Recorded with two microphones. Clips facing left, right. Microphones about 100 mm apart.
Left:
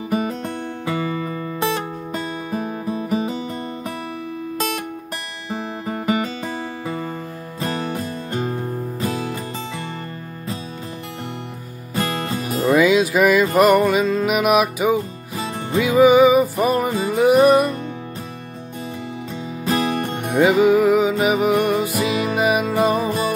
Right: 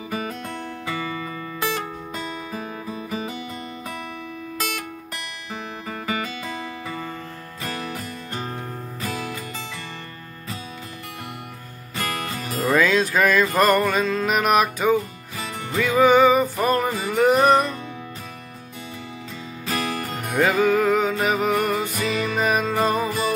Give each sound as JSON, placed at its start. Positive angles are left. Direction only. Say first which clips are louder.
{"t": 0.1, "sound": "music", "louder": "left 7 dB", "side_deg": 30}
{"t": 2.6, "sound": "music", "louder": "left 7 dB", "side_deg": 15}
{"t": 3.1, "sound": "music", "louder": "left 7 dB", "side_deg": 30}
{"t": 5.5, "sound": "music", "louder": "left 7 dB", "side_deg": 30}
{"t": 12.0, "sound": "music", "louder": "left 5 dB", "side_deg": 30}
{"t": 12.7, "sound": "music", "louder": "left 4 dB", "side_deg": 10}
{"t": 15.3, "sound": "music", "louder": "left 6 dB", "side_deg": 30}
{"t": 15.8, "sound": "music", "louder": "left 3 dB", "side_deg": 10}
{"t": 19.6, "sound": "music", "louder": "left 6 dB", "side_deg": 35}
{"t": 20.4, "sound": "music", "louder": "left 5 dB", "side_deg": 15}
{"t": 21.7, "sound": "music", "louder": "left 4 dB", "side_deg": 15}
{"t": 22.9, "sound": "music", "louder": "left 3 dB", "side_deg": 35}